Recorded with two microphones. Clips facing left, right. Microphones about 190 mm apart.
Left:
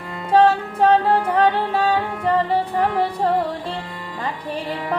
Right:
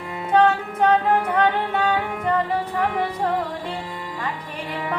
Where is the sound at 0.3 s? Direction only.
30° left (ahead or behind).